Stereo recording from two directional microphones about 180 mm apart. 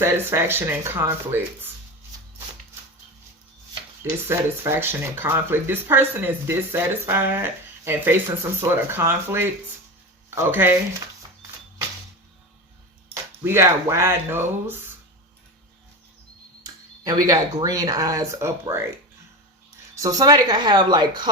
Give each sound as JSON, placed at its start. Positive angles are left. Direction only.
{"t": 0.0, "sound": "speech", "side_deg": -15}
{"t": 4.3, "sound": "speech", "side_deg": -15}
{"t": 13.4, "sound": "speech", "side_deg": -15}
{"t": 17.0, "sound": "speech", "side_deg": -20}
{"t": 20.0, "sound": "speech", "side_deg": -20}